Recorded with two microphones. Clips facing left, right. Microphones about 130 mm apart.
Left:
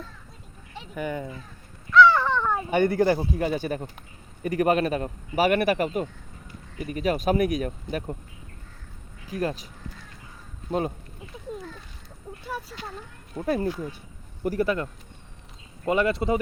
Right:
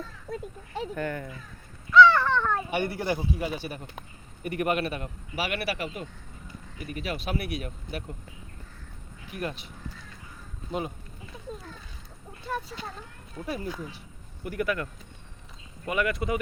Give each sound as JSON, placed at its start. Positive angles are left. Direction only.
{"t": 0.3, "sound": "a sound", "side_deg": -55}
{"t": 0.9, "sound": "speech", "side_deg": 15}
{"t": 2.0, "sound": "a sound", "side_deg": 10}
{"t": 2.6, "sound": "a man's voice", "side_deg": 45}
{"t": 9.3, "sound": "speech", "side_deg": 35}
{"t": 10.7, "sound": "speech", "side_deg": 40}
{"t": 12.5, "sound": "speech", "side_deg": 5}
{"t": 13.4, "sound": "a man's voice", "side_deg": 50}
{"t": 14.4, "sound": "speech", "side_deg": 35}